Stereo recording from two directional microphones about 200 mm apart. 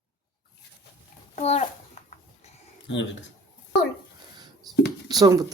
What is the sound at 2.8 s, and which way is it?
Speech, 65° left (ahead or behind).